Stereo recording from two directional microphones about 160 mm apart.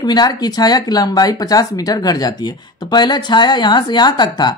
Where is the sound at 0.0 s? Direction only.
25° left (ahead or behind).